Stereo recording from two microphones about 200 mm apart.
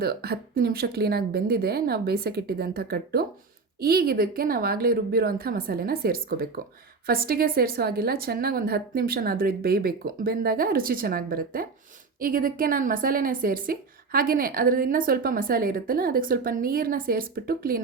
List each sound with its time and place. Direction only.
0.0 s a woman's voice: 50° right (ahead or behind)